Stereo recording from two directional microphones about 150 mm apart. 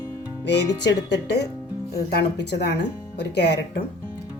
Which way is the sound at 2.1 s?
90° left.